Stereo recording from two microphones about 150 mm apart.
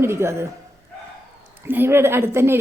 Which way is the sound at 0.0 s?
15° right (ahead or behind).